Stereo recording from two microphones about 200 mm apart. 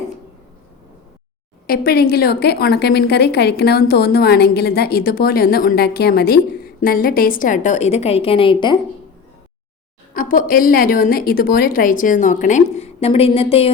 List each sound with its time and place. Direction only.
1.6 s a woman's voice: 50° left (ahead or behind); by 8.8 s 25° left (ahead or behind)
10.2 s a woman's voice: 45° left (ahead or behind)